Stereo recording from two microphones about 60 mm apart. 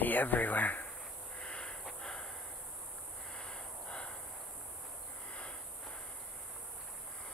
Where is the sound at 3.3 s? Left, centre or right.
Centre.